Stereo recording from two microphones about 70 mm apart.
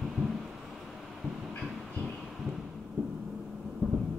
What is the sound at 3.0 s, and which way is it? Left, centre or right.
Vehicle, right.